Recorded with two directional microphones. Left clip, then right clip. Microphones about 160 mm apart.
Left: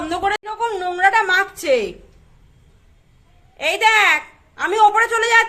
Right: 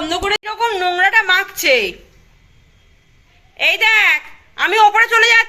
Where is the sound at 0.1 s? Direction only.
45° right (ahead or behind).